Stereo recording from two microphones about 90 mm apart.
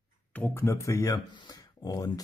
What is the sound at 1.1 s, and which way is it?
Speech, 55° left (ahead or behind).